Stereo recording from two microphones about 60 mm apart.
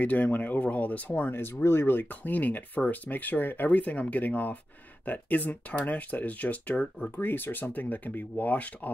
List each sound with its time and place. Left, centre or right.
0.0 s speech: left
1.3 s speech: left
7.2 s speech: left